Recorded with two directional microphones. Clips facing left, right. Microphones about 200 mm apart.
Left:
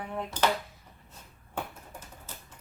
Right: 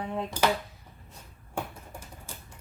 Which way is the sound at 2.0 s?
10° right (ahead or behind).